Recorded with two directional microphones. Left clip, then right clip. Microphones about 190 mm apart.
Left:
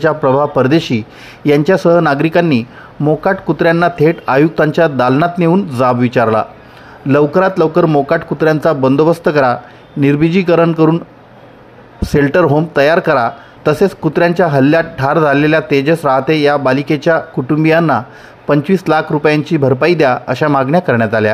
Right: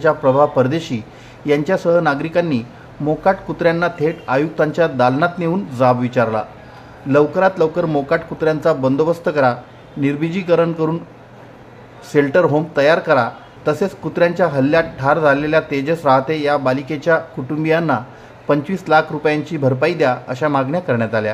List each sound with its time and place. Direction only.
0.0 s speech: 35° left (ahead or behind)
12.1 s speech: 35° left (ahead or behind)